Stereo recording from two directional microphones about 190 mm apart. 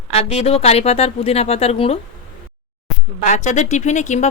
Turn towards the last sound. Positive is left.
turn(degrees=40)  # may be behind; listen again after turning